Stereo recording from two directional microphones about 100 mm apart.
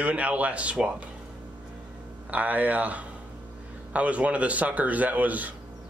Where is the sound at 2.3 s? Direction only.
15° right (ahead or behind).